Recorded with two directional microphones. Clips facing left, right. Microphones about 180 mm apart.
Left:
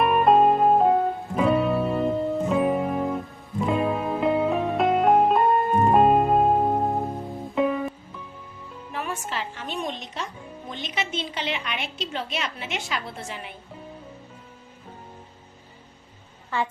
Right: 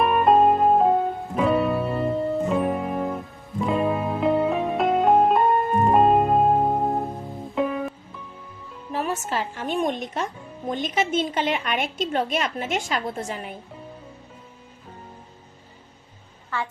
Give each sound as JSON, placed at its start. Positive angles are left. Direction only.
{"t": 0.0, "sound": "music", "side_deg": 0}
{"t": 8.9, "sound": "music", "side_deg": -40}
{"t": 10.7, "sound": "a woman's voice", "side_deg": -45}